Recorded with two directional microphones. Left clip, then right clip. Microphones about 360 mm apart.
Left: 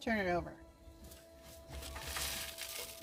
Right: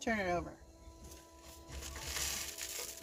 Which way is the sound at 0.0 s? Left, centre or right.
Centre.